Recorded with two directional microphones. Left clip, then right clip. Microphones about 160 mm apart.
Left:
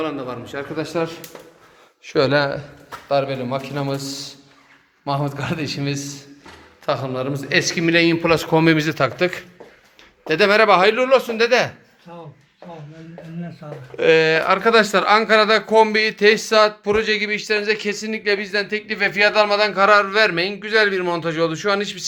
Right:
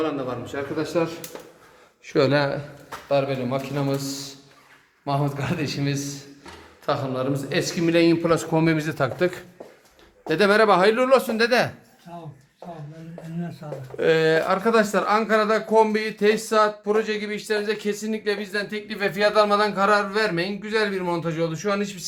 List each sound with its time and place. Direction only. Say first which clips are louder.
0.0 s a man's voice: left 1 dB; 15° left (ahead or behind)
2.1 s speech: left 3 dB; 15° right (ahead or behind)
3.1 s a man's voice: left 2 dB; 5° left (ahead or behind)
6.8 s speech: left 2 dB; 15° left (ahead or behind); by 10.9 s 15° right (ahead or behind)
10.9 s speech: left 3 dB; 30° right (ahead or behind)
13.9 s speech: left 4 dB; 10° right (ahead or behind); by 22.0 s 10° left (ahead or behind)